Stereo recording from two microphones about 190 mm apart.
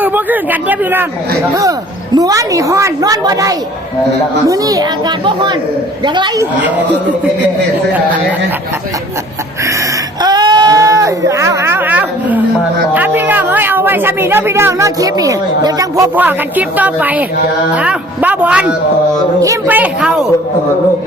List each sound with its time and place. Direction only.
0.0 s speech: 10° right (ahead or behind)
2.1 s a woman's voice: 20° right (ahead or behind)
10.2 s sheep: 20° right (ahead or behind)
12.9 s speech: 10° right (ahead or behind)